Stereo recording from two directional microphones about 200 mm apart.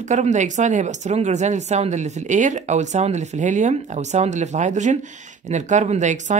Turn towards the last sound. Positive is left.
turn(degrees=-40)  # may be behind; listen again after turning